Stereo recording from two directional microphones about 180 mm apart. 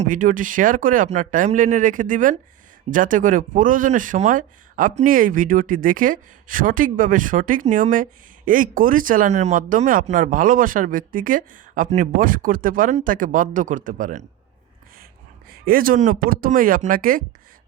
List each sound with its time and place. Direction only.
0.0 s speech: 45° right (ahead or behind)
15.4 s speech: 55° right (ahead or behind)